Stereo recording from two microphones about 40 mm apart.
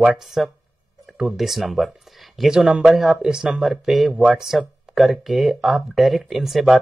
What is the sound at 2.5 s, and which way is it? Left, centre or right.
Speech, centre.